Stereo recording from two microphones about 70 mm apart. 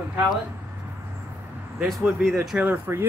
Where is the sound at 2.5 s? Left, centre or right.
Right.